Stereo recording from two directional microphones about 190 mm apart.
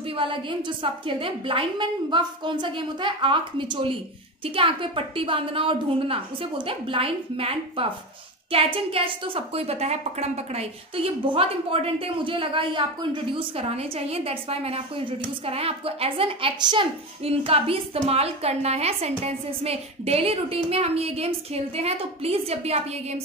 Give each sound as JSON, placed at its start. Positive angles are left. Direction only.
{"t": 0.1, "sound": "a woman's voice", "side_deg": -25}